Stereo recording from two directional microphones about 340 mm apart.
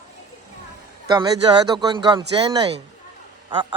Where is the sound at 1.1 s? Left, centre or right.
Centre.